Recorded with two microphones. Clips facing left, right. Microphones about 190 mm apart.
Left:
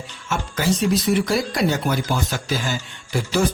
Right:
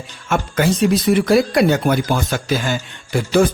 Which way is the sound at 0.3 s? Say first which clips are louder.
Right 5 dB; 55° right (ahead or behind).